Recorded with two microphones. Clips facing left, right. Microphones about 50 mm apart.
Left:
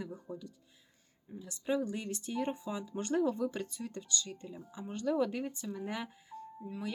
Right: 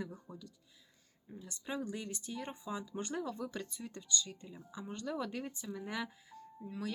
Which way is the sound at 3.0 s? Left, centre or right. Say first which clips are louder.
Left 11 dB; centre.